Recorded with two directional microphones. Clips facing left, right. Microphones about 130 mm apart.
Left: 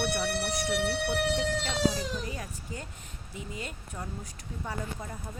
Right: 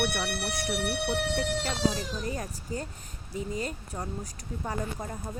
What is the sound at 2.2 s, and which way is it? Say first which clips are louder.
Speech: right 4 dB; 40° right (ahead or behind).